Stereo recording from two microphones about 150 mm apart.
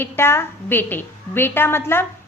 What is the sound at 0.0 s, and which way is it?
A woman's voice, 15° left (ahead or behind).